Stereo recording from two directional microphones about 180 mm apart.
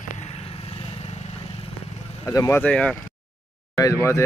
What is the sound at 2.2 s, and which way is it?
Speech, 15° left (ahead or behind).